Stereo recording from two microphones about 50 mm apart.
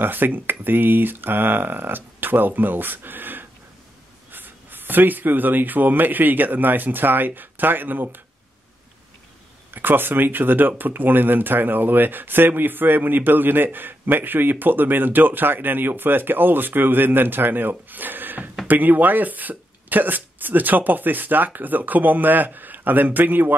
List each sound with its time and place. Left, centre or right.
0.0 s speech: right
9.8 s speech: right